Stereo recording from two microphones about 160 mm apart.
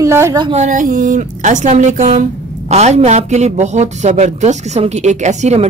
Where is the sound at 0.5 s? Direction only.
50° right (ahead or behind).